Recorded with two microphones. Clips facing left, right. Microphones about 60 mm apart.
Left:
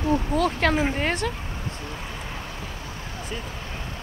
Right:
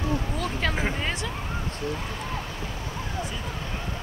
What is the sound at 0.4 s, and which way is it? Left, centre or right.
Speech, left.